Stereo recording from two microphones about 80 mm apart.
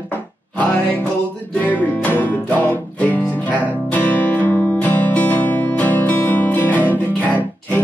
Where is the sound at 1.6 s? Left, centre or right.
Left.